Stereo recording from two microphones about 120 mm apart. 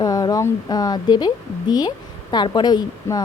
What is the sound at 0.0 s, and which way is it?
A woman's voice, 30° left (ahead or behind).